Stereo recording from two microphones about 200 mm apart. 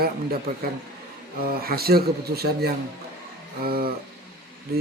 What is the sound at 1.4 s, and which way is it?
Speech, 50° right (ahead or behind).